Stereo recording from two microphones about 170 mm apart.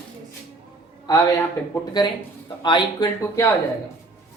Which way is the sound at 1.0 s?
20° left (ahead or behind).